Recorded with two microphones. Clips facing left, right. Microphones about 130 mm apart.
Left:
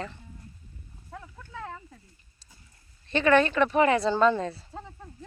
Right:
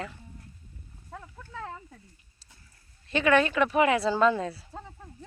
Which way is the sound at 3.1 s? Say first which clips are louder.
Left 2 dB; 5° right (ahead or behind).